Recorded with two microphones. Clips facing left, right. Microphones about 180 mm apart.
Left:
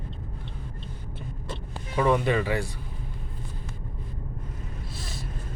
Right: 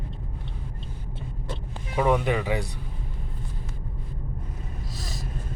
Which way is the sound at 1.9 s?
15° right (ahead or behind).